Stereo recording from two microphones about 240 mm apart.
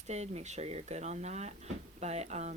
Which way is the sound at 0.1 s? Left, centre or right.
Right.